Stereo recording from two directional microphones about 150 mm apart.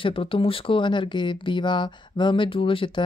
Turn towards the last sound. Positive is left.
turn(degrees=35)  # may be behind; listen again after turning